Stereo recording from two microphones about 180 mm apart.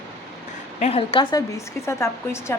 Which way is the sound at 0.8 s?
35° left (ahead or behind).